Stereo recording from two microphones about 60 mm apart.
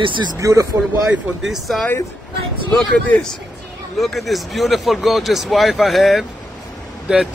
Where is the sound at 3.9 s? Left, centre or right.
Centre.